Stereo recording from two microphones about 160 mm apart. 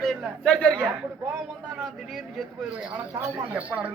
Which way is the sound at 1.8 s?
Centre (ahead or behind).